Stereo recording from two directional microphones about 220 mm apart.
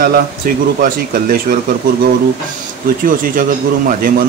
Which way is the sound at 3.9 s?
35° right (ahead or behind).